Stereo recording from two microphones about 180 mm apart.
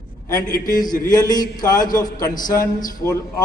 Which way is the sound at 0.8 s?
20° left (ahead or behind).